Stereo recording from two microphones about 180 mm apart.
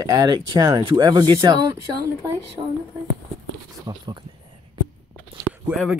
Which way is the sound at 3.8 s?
25° right (ahead or behind).